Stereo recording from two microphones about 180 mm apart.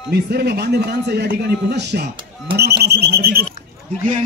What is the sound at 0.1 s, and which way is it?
Speech, 60° right (ahead or behind).